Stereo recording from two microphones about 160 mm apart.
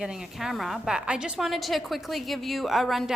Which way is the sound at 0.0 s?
5° right (ahead or behind).